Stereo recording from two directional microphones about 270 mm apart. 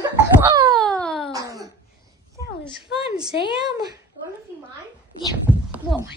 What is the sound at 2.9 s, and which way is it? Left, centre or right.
Speech, left.